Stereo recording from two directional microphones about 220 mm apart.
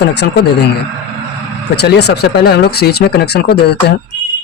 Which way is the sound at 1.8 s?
50° left (ahead or behind).